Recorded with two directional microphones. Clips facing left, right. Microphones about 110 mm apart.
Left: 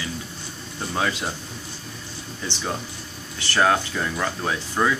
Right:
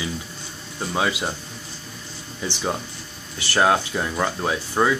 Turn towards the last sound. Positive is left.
turn(degrees=-15)  # may be behind; listen again after turning